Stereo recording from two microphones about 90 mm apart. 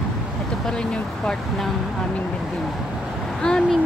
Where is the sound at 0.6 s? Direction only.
10° left (ahead or behind).